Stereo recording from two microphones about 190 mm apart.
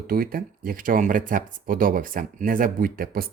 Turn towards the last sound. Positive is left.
turn(degrees=-50)  # may be behind; listen again after turning